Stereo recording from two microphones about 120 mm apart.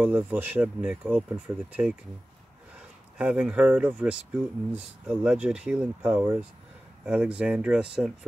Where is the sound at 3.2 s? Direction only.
10° right (ahead or behind).